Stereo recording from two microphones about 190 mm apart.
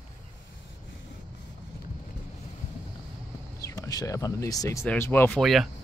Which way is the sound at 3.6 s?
15° left (ahead or behind).